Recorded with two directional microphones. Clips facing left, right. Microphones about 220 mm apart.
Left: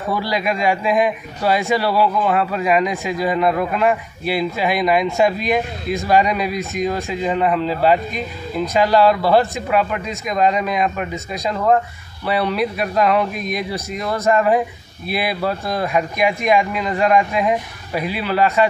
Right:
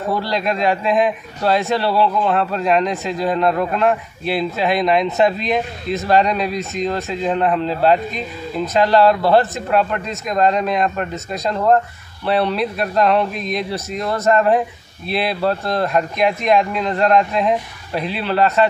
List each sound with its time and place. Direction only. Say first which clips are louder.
0.2 s a man's voice: right 1 dB; 10° left (ahead or behind)